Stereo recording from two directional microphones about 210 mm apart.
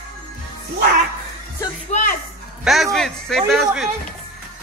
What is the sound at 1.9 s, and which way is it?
Music, 30° left (ahead or behind).